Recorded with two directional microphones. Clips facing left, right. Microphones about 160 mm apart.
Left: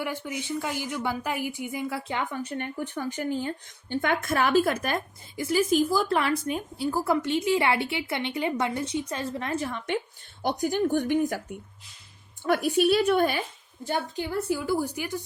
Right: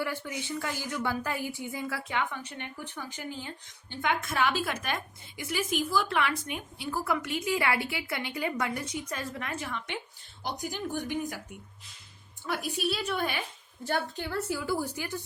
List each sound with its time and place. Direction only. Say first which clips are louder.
0.0 s a woman's voice: left 2 dB; 20° left (ahead or behind)
2.1 s a woman's voice: left 1 dB; 45° left (ahead or behind)
10.4 s speech: left 10 dB; 55° left (ahead or behind)
12.5 s speech: left 10 dB; 60° left (ahead or behind)
13.8 s a woman's voice: left 2 dB; 15° left (ahead or behind)